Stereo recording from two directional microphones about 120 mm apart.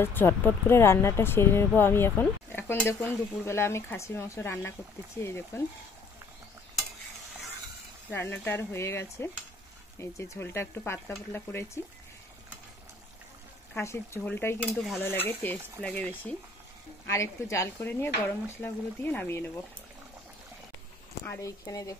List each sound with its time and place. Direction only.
0.0 s speech: 20° left (ahead or behind)
8.1 s speech: 15° left (ahead or behind)
13.7 s speech: 20° left (ahead or behind)
17.0 s speech: 25° left (ahead or behind)
21.2 s speech: 25° left (ahead or behind)